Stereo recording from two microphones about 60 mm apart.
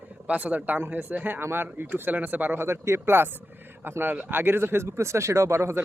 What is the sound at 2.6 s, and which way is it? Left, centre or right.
A man's voice, right.